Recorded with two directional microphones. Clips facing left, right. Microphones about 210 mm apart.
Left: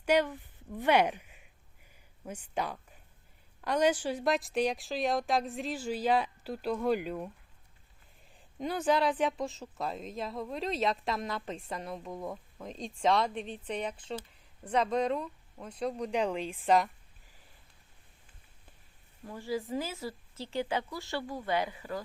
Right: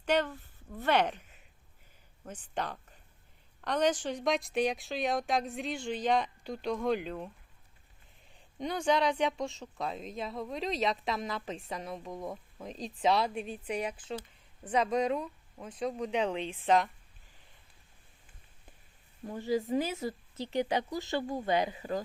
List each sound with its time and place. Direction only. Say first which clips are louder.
0.0 s speech: left 2 dB; 10° left (ahead or behind)
8.5 s speech: even; 5° left (ahead or behind)
19.2 s speech: right 4 dB; 20° right (ahead or behind)